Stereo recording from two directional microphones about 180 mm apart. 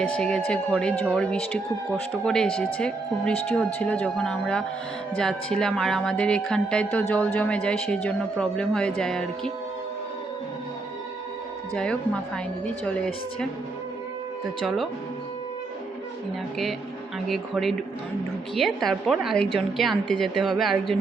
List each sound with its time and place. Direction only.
0.0 s a woman's voice: 5° left (ahead or behind)
11.8 s a woman's voice: 5° left (ahead or behind)
17.2 s a woman's voice: centre (ahead or behind)